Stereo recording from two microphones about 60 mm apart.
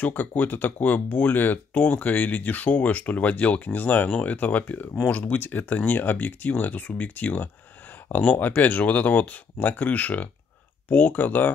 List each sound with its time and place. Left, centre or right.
0.0 s speech: left